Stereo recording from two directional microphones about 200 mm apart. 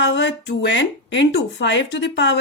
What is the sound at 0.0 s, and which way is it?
Speech, 65° left (ahead or behind).